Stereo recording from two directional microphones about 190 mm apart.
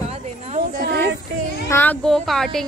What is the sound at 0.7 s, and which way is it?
Speech, 55° right (ahead or behind).